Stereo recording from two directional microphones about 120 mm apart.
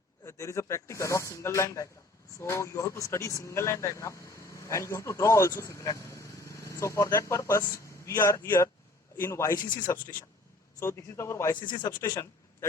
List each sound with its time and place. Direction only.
0.3 s speech: 25° left (ahead or behind)
9.6 s speech: 40° left (ahead or behind)
10.8 s speech: 20° left (ahead or behind)
11.6 s a man's voice: 35° left (ahead or behind)